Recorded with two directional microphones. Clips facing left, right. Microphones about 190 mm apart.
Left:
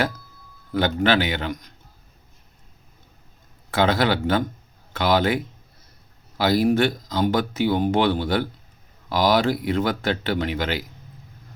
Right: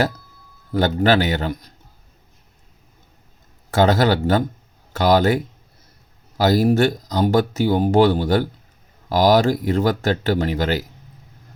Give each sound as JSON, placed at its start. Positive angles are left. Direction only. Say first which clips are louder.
{"t": 0.7, "sound": "a man's voice", "louder": "right 3 dB", "side_deg": -40}
{"t": 3.7, "sound": "speech", "louder": "right 4 dB", "side_deg": -45}